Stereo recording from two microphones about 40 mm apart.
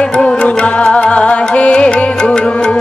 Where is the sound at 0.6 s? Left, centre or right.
Left.